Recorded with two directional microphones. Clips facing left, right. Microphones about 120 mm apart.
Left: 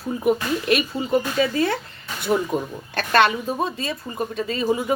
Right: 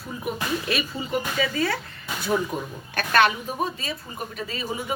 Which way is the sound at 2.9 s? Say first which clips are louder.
Left 2 dB; 30° left (ahead or behind).